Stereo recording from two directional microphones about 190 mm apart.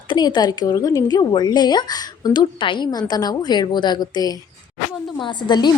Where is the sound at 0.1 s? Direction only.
20° left (ahead or behind).